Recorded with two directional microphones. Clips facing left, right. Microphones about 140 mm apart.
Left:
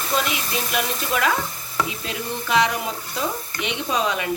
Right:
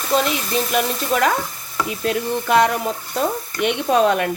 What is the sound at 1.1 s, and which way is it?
Speech, 40° right (ahead or behind).